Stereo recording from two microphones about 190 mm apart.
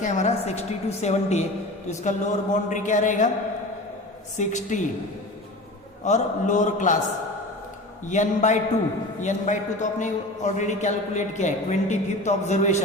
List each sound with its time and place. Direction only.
0.0 s a man's voice: 40° left (ahead or behind)
4.4 s a man's voice: 40° left (ahead or behind)
6.1 s a man's voice: 40° left (ahead or behind)
8.0 s a man's voice: 40° left (ahead or behind)